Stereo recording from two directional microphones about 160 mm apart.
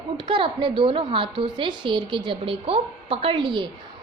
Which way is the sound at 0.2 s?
30° right (ahead or behind).